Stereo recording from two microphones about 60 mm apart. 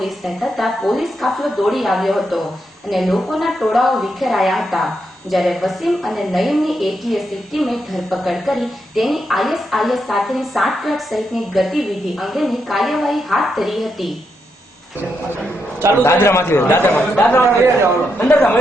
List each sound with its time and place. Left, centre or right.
0.0 s a woman's voice: centre
16.0 s a man's voice: left